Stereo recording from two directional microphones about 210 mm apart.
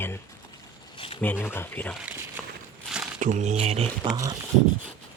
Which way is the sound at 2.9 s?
5° right (ahead or behind).